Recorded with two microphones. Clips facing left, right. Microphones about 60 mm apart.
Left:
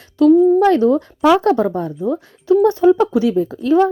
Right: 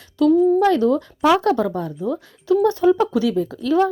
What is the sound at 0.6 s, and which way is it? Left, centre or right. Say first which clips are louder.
A woman's voice: left 4 dB; left.